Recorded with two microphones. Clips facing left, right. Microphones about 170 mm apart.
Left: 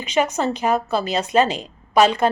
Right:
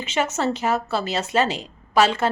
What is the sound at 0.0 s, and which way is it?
Speech, 15° left (ahead or behind).